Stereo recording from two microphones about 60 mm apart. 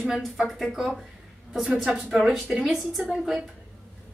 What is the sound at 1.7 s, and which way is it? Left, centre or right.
A woman's voice, centre.